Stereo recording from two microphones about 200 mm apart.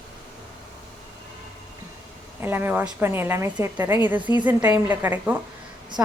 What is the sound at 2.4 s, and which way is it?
A woman's voice, 10° right (ahead or behind).